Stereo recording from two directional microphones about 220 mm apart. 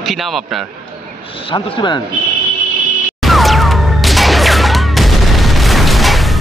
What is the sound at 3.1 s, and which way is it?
Music, centre (ahead or behind).